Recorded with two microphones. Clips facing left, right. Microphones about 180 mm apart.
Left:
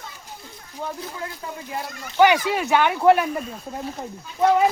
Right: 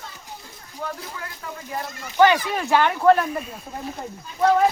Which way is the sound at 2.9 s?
15° left (ahead or behind).